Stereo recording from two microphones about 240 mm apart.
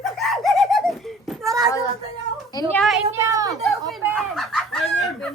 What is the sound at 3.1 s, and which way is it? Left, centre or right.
Speech, centre.